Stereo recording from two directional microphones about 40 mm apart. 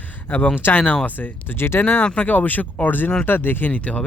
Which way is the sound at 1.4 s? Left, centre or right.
Left.